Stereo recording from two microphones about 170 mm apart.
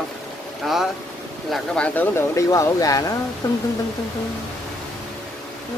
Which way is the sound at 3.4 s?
20° left (ahead or behind).